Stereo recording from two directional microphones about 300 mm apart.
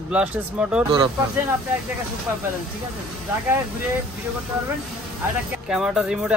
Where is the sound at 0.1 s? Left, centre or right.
Centre.